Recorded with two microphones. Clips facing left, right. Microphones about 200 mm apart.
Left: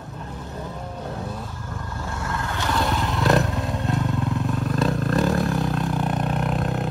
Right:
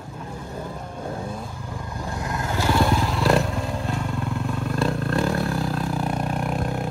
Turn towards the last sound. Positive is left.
turn(degrees=0)  # may be behind; listen again after turning